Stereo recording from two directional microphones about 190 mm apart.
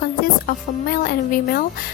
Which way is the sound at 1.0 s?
50° left (ahead or behind).